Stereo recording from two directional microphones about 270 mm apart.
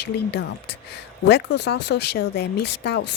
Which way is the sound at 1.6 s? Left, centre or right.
Left.